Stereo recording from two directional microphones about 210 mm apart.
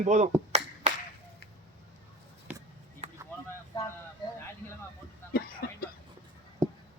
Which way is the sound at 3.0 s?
35° right (ahead or behind).